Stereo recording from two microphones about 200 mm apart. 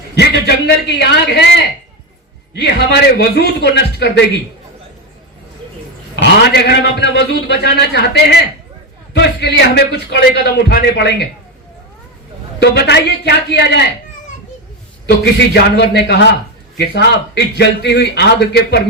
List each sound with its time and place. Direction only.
0.2 s a man's voice: 55° left (ahead or behind)
2.6 s a man's voice: 55° left (ahead or behind)
6.1 s a man's voice: 60° left (ahead or behind)
12.5 s a man's voice: 55° left (ahead or behind)
15.2 s a man's voice: 55° left (ahead or behind)